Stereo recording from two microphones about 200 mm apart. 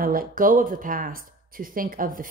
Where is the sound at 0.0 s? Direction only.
45° right (ahead or behind).